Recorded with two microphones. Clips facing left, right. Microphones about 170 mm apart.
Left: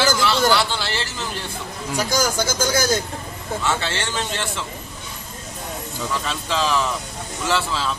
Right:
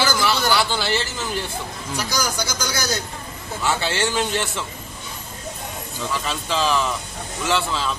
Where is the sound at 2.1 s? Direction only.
50° left (ahead or behind).